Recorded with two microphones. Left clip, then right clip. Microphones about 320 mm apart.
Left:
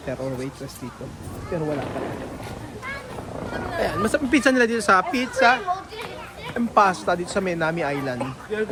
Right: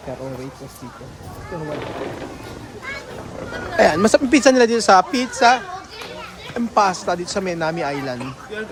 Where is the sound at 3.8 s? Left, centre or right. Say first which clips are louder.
Right 10 dB; right; by 8.1 s centre.